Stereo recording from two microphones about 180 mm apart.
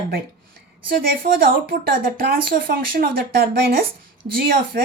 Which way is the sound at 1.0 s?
55° right (ahead or behind).